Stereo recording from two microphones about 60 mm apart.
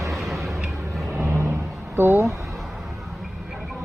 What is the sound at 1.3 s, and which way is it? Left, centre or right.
Vehicle, right.